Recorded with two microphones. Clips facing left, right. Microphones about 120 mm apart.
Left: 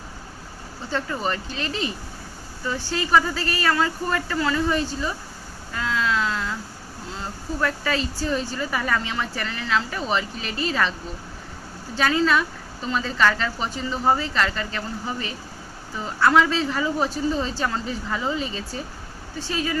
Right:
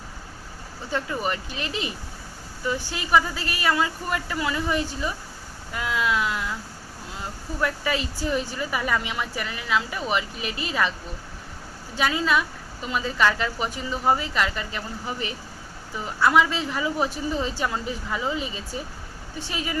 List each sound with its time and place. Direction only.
0.9 s speech: 15° right (ahead or behind)
5.7 s a sound: 15° right (ahead or behind)
7.2 s speech: 15° right (ahead or behind)
11.9 s speech: 10° right (ahead or behind)
16.2 s speech: 15° right (ahead or behind)